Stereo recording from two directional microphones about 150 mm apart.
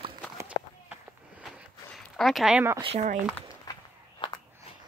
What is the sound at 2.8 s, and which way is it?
Speech, 45° right (ahead or behind).